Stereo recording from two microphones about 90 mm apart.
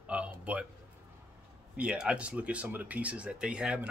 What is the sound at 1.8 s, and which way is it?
Speech, 10° right (ahead or behind).